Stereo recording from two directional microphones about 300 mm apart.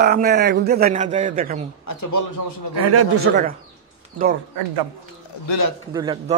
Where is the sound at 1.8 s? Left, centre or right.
Left.